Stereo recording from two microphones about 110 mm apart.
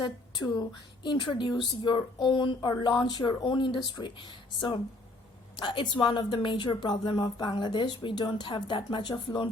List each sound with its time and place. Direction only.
0.0 s a woman's voice: 40° left (ahead or behind)